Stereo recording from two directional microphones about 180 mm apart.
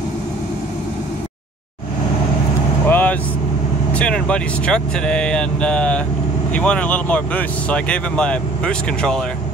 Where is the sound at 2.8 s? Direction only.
10° left (ahead or behind).